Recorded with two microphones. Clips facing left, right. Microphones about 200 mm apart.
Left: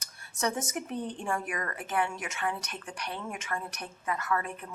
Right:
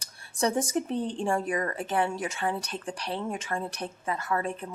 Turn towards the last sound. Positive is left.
turn(degrees=-30)  # may be behind; listen again after turning